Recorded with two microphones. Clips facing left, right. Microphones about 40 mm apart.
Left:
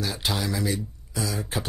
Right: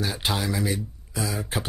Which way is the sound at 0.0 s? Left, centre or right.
Centre.